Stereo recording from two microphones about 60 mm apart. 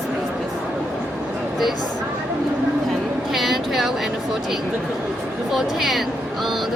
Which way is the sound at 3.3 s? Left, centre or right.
Centre.